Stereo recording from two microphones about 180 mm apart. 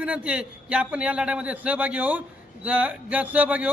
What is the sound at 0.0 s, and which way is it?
Speech, 5° right (ahead or behind).